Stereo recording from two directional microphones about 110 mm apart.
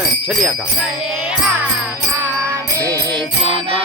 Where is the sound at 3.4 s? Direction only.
55° right (ahead or behind).